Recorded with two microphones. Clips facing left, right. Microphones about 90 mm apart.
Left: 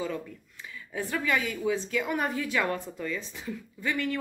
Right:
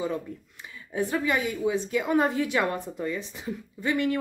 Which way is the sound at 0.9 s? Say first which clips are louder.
Right 3 dB; 20° right (ahead or behind).